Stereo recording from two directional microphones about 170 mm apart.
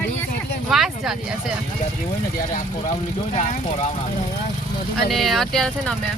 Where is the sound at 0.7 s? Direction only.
Centre (ahead or behind).